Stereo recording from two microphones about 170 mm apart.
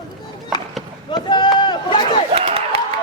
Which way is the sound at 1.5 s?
25° left (ahead or behind).